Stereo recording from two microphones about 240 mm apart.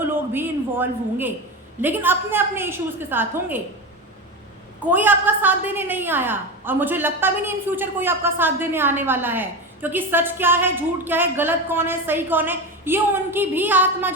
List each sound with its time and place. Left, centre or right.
0.0 s a man's voice: centre
4.9 s a woman's voice: centre